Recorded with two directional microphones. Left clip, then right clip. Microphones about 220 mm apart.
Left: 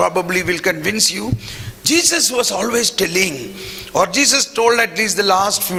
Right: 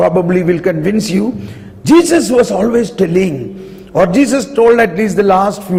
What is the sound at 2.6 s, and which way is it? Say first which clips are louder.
Speech: right 4 dB; 5° left (ahead or behind).